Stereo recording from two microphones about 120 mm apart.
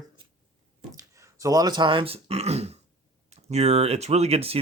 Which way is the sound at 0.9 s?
30° right (ahead or behind).